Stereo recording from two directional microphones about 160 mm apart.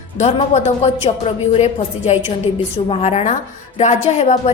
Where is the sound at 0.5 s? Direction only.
40° left (ahead or behind).